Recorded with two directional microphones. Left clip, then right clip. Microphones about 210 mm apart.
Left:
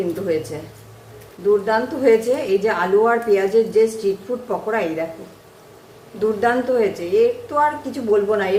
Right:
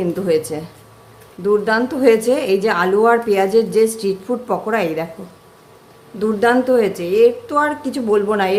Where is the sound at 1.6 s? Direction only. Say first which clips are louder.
Right 3 dB; 50° right (ahead or behind).